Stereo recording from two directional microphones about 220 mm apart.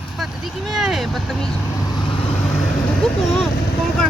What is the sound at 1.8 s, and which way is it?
Vehicle, 20° left (ahead or behind).